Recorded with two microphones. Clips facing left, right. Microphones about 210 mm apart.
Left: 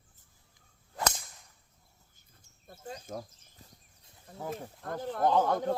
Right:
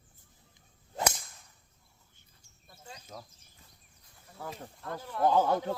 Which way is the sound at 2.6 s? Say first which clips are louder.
Left 8 dB; 50° left (ahead or behind).